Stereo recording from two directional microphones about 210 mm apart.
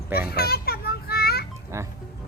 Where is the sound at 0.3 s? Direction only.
45° left (ahead or behind).